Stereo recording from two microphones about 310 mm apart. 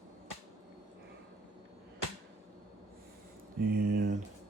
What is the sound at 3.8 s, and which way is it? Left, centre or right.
Speech, right.